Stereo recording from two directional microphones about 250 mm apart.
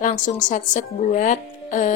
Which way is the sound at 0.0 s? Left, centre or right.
Left.